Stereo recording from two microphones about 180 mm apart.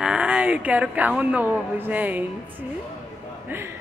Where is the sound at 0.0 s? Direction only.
5° right (ahead or behind).